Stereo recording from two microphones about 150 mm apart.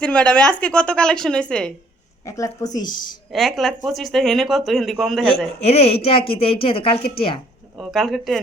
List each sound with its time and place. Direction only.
0.0 s a woman's voice: 5° left (ahead or behind)
2.2 s speech: 20° left (ahead or behind)
3.3 s a man's voice: centre (ahead or behind)
5.5 s a woman's voice: 45° left (ahead or behind)
7.8 s a man's voice: centre (ahead or behind)